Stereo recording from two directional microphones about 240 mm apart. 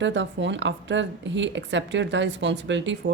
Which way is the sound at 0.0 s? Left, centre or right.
Right.